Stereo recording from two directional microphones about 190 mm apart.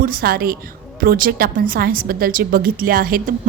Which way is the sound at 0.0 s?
50° right (ahead or behind).